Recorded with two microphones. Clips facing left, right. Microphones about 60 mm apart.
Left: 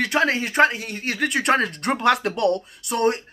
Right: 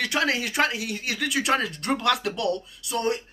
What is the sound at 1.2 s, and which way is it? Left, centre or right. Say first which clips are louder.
Speech: left 4 dB; left.